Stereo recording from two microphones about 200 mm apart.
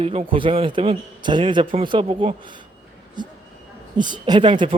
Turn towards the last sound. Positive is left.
turn(degrees=-25)  # may be behind; listen again after turning